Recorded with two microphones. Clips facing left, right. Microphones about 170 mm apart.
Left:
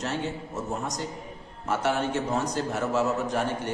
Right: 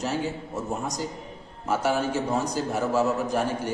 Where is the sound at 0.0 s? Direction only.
5° right (ahead or behind).